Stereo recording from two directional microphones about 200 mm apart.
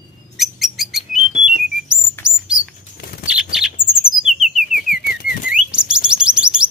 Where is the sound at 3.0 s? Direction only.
50° left (ahead or behind).